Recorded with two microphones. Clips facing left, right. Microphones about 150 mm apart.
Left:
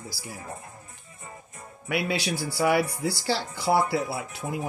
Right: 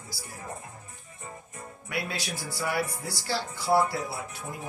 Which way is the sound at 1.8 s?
75° left (ahead or behind).